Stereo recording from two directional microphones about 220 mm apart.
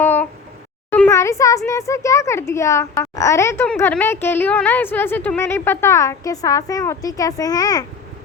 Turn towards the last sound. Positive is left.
turn(degrees=15)  # may be behind; listen again after turning